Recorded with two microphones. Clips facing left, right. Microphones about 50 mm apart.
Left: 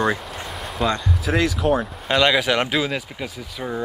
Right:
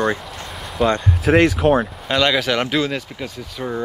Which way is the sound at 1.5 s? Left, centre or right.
Right.